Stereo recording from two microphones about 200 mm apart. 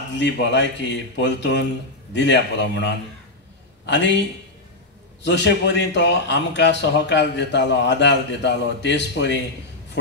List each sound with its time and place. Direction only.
0.1 s a man's voice: 60° left (ahead or behind)
5.2 s a man's voice: 60° left (ahead or behind)